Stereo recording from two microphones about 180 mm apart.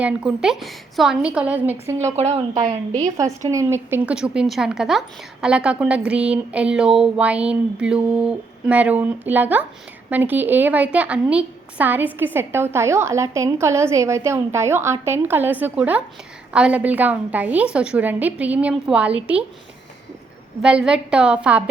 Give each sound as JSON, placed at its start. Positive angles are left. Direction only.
{"t": 0.0, "sound": "a woman's voice", "side_deg": -5}
{"t": 2.1, "sound": "speech", "side_deg": -35}
{"t": 3.2, "sound": "a woman's voice", "side_deg": -15}
{"t": 20.6, "sound": "a woman's voice", "side_deg": -5}